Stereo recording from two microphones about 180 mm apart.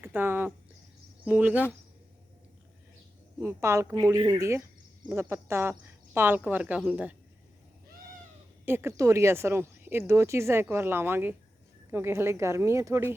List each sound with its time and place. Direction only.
0.0 s speech: 10° right (ahead or behind)
3.3 s speech: 15° right (ahead or behind)
8.6 s speech: 15° right (ahead or behind)